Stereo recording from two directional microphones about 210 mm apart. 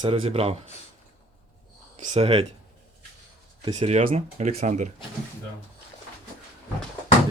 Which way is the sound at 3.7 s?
30° right (ahead or behind).